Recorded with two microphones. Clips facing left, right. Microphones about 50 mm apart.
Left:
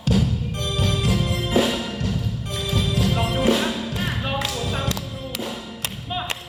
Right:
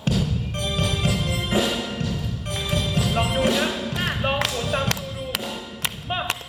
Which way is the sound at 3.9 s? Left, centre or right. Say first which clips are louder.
Right 2 dB; right.